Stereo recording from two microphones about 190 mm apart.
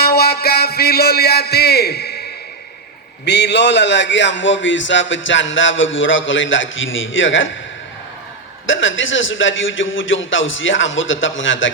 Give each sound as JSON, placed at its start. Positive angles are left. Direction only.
{"t": 0.0, "sound": "a man's voice", "side_deg": 55}
{"t": 3.2, "sound": "a man's voice", "side_deg": 65}
{"t": 8.6, "sound": "a man's voice", "side_deg": 90}